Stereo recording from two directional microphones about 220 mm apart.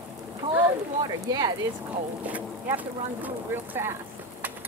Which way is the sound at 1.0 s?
20° right (ahead or behind).